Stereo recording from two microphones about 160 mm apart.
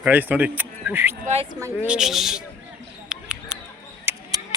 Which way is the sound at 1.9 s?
5° right (ahead or behind).